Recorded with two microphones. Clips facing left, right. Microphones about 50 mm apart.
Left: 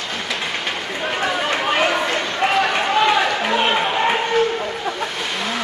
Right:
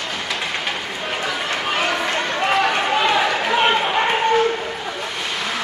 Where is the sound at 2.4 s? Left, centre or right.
Centre.